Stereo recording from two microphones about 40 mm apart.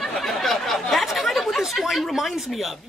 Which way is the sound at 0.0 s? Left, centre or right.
Centre.